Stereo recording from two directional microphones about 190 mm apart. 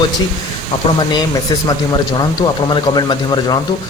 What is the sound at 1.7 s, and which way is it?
Speech, 20° left (ahead or behind).